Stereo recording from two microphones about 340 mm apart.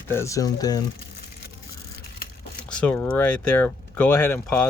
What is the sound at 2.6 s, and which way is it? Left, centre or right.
Speech, centre.